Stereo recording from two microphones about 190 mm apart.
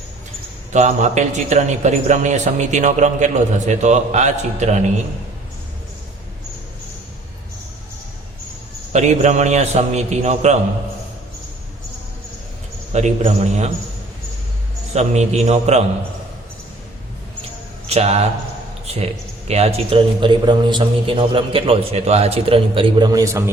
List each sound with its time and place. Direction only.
0.7 s a man's voice: 35° right (ahead or behind)
8.9 s a man's voice: 35° right (ahead or behind)
12.9 s a man's voice: 35° right (ahead or behind)
14.9 s a man's voice: 35° right (ahead or behind)
17.8 s a man's voice: 35° right (ahead or behind); by 23.4 s 15° right (ahead or behind)